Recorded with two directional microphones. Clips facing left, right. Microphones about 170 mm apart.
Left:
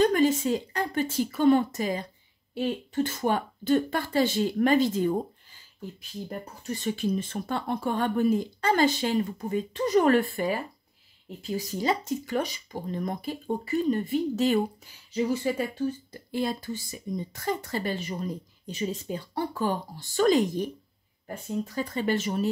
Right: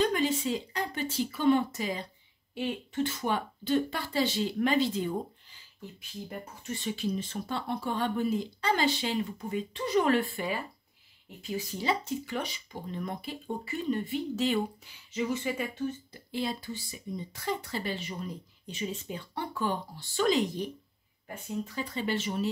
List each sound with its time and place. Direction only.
0.0 s speech: 45° left (ahead or behind)
21.6 s speech: 45° left (ahead or behind)